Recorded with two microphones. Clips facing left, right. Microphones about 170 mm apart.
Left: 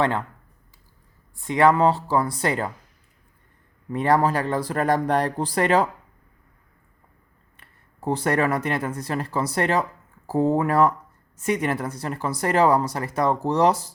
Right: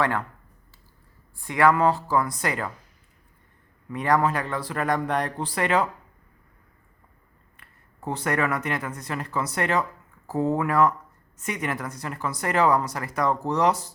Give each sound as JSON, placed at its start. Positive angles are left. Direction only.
{"t": 0.0, "sound": "speech", "side_deg": 25}
{"t": 1.5, "sound": "speech", "side_deg": 25}
{"t": 3.8, "sound": "speech", "side_deg": 30}
{"t": 7.5, "sound": "speech", "side_deg": 30}